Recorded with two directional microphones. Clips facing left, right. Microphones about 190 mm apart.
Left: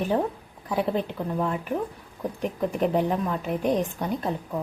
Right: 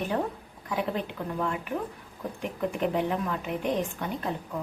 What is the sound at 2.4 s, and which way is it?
A woman's voice, 40° left (ahead or behind).